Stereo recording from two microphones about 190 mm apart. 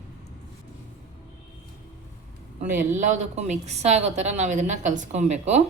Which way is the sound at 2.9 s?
40° right (ahead or behind).